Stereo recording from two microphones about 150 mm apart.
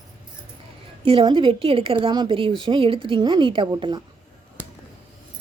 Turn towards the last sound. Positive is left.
turn(degrees=-30)  # may be behind; listen again after turning